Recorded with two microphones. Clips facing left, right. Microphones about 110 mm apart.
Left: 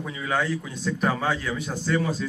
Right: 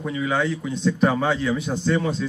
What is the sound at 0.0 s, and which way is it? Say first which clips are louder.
Speech: right 4 dB; centre (ahead or behind).